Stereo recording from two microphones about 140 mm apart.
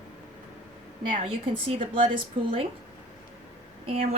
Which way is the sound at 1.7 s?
40° right (ahead or behind).